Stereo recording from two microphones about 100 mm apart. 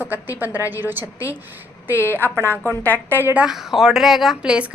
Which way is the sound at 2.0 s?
20° left (ahead or behind).